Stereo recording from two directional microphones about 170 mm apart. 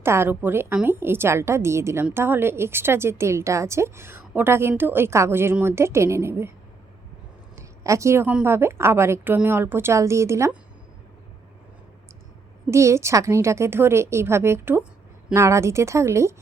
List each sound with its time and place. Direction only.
0.0 s a woman's voice: 15° right (ahead or behind)
7.5 s a woman's voice: 15° right (ahead or behind)
12.7 s a woman's voice: 15° right (ahead or behind)